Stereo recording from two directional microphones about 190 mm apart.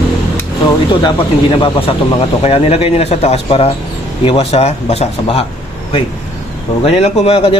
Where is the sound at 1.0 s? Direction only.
25° left (ahead or behind).